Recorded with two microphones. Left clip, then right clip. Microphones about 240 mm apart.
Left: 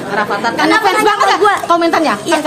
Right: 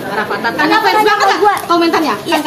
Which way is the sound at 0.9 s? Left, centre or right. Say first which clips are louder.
Even; left.